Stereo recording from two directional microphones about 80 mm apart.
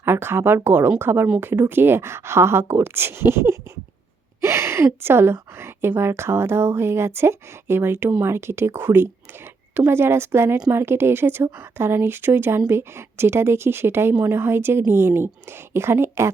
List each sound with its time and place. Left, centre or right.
0.0 s speech: right